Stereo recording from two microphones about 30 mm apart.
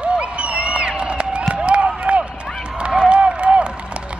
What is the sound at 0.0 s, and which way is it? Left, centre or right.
Crowd, right.